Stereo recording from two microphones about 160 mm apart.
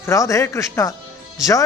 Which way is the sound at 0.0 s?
20° left (ahead or behind).